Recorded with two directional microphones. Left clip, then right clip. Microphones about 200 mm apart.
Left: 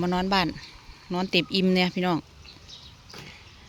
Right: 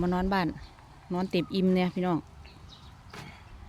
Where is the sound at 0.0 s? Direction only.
Centre (ahead or behind).